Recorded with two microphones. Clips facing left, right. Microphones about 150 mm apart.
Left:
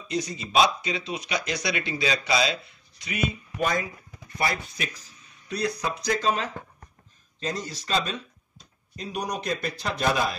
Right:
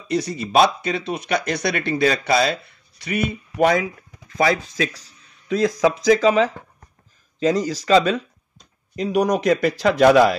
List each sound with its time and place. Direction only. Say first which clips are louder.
0.1 s speech: right 7 dB; 60° right (ahead or behind)
4.3 s speech: right 9 dB; 90° right